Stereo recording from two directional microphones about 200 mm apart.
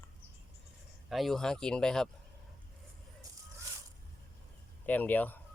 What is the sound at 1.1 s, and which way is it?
Speech, centre (ahead or behind).